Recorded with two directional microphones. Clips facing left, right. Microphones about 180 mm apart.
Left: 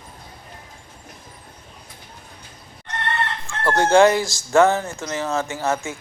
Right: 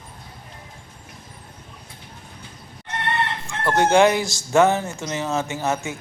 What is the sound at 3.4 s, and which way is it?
Speech, 20° right (ahead or behind).